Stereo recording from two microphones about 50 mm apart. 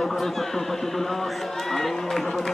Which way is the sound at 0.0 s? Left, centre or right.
Centre.